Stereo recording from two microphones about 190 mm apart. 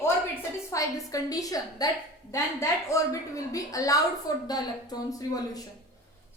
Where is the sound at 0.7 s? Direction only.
15° left (ahead or behind).